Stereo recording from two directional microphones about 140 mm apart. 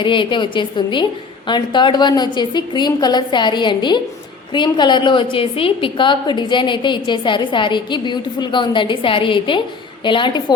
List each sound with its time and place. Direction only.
0.0 s a woman's voice: 35° left (ahead or behind)